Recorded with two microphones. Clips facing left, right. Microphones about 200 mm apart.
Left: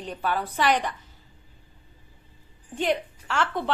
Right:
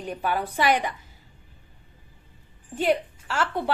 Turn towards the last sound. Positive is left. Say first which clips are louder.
# even
turn(degrees=-10)  # may be behind; listen again after turning